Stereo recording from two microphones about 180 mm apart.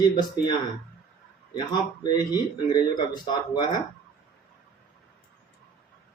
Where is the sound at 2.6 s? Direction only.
25° left (ahead or behind).